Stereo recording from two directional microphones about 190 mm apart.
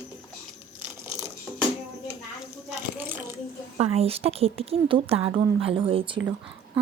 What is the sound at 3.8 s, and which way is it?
Speech, 30° right (ahead or behind).